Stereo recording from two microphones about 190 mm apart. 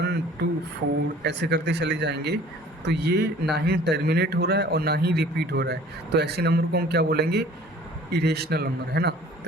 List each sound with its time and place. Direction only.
0.4 s a man's voice: 60° right (ahead or behind)